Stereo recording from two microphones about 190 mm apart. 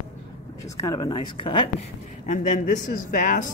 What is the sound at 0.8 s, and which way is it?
A woman's voice, 20° left (ahead or behind).